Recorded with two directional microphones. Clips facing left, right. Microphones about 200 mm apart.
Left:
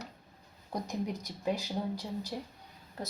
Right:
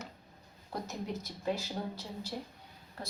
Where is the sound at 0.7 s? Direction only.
15° left (ahead or behind).